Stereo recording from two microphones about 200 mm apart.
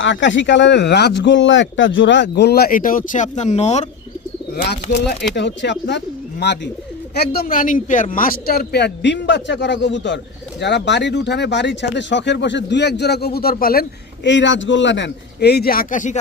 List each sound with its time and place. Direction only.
0.0 s speech: 65° left (ahead or behind); by 3.8 s 35° left (ahead or behind)
4.5 s speech: 55° left (ahead or behind)
14.3 s speech: 65° left (ahead or behind); by 16.1 s 40° left (ahead or behind)